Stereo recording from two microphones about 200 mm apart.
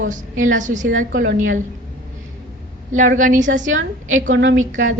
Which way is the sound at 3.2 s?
40° right (ahead or behind).